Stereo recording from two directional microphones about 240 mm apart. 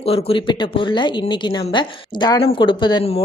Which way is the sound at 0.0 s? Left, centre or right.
Left.